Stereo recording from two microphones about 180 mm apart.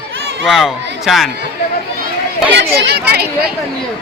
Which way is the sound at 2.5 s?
65° right (ahead or behind).